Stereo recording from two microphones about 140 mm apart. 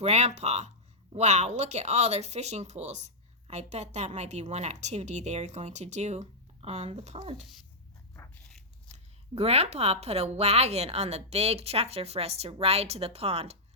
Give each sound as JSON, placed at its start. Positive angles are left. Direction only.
{"t": 0.0, "sound": "speech", "side_deg": -55}
{"t": 8.9, "sound": "speech", "side_deg": -45}